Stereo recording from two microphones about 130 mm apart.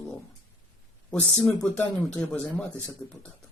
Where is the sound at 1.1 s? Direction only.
10° left (ahead or behind).